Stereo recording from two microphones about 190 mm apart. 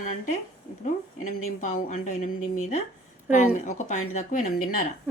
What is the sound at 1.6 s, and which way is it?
Speech, 40° left (ahead or behind).